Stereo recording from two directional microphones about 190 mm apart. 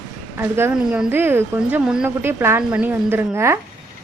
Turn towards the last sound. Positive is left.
turn(degrees=-15)  # may be behind; listen again after turning